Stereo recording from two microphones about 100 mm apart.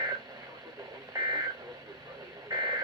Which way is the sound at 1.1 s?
45° right (ahead or behind).